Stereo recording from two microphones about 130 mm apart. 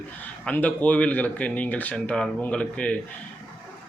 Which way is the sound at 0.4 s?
10° left (ahead or behind).